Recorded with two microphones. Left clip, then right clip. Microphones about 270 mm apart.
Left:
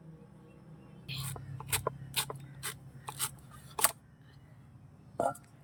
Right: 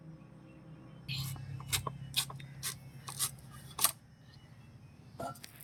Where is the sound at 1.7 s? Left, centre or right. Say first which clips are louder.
Left 2 dB; centre.